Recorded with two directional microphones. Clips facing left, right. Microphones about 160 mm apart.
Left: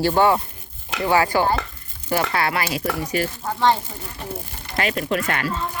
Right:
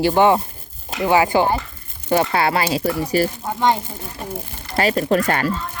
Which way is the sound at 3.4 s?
15° right (ahead or behind).